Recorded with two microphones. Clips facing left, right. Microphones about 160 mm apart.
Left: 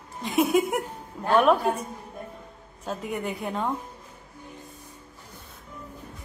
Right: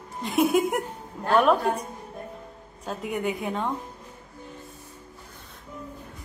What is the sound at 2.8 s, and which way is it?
Speech, centre (ahead or behind).